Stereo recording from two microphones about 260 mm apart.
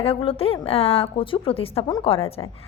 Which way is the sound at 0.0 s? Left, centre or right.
Left.